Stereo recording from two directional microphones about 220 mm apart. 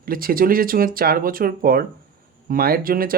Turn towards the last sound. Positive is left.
turn(degrees=-40)  # may be behind; listen again after turning